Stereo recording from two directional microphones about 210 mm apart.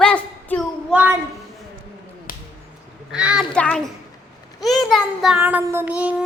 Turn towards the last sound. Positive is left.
turn(degrees=-5)  # may be behind; listen again after turning